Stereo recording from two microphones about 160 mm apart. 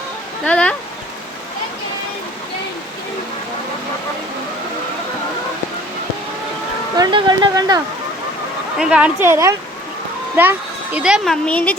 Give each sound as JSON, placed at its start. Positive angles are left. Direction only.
{"t": 0.4, "sound": "speech", "side_deg": 10}
{"t": 6.9, "sound": "speech", "side_deg": -25}
{"t": 8.8, "sound": "speech", "side_deg": -5}
{"t": 10.9, "sound": "speech", "side_deg": -5}
{"t": 11.4, "sound": "speech", "side_deg": 5}